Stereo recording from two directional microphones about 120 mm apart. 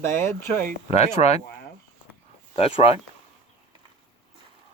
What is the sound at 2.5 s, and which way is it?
Speech, 55° left (ahead or behind).